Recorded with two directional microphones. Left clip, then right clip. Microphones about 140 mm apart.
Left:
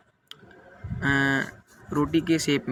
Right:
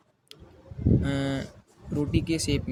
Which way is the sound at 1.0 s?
50° right (ahead or behind).